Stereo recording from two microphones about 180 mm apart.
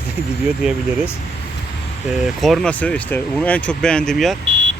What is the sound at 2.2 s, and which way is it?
Speech, centre (ahead or behind).